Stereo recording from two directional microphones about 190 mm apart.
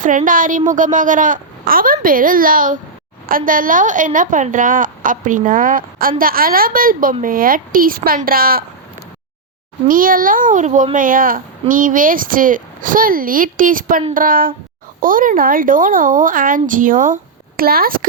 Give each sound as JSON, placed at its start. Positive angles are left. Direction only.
{"t": 0.0, "sound": "a woman's voice", "side_deg": -45}
{"t": 9.8, "sound": "a woman's voice", "side_deg": -45}